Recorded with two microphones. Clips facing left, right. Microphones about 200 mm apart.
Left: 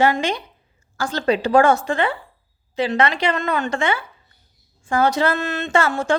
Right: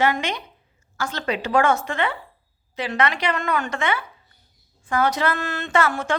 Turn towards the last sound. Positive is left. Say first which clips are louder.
# left 3 dB
turn(degrees=30)  # may be behind; listen again after turning